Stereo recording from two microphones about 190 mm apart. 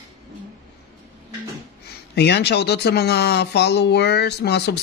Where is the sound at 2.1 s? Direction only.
60° left (ahead or behind).